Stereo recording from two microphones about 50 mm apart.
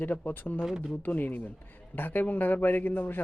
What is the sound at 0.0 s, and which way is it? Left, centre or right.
A man's voice, left.